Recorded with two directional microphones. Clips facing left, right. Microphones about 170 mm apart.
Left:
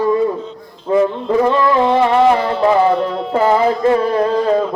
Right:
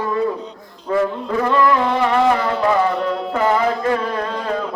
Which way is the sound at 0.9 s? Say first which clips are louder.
Left 5 dB; 20° left (ahead or behind).